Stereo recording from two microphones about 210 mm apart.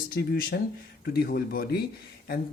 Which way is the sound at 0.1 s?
45° left (ahead or behind).